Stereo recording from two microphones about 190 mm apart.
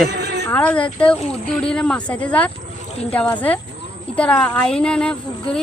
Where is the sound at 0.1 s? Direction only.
60° right (ahead or behind).